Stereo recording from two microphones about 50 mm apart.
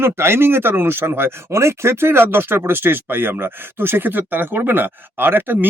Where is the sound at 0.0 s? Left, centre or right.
Right.